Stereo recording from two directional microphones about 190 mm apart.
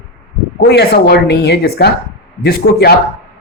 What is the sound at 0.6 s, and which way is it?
Speech, 60° left (ahead or behind).